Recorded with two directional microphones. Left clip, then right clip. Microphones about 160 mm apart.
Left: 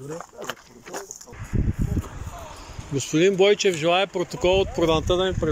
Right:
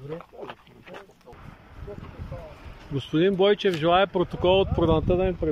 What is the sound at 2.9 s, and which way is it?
Speech, 5° right (ahead or behind).